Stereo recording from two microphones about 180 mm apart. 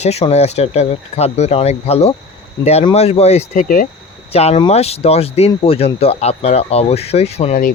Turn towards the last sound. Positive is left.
turn(degrees=35)  # may be behind; listen again after turning